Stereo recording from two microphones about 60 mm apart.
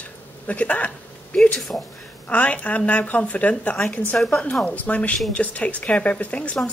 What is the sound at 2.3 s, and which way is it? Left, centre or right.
Speech, left.